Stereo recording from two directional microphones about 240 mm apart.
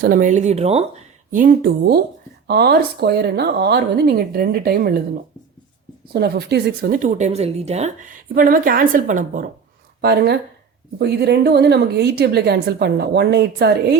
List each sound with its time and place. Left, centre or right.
0.0 s a woman's voice: right